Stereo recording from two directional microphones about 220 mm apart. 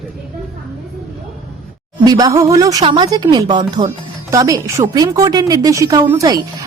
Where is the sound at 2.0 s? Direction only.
15° right (ahead or behind).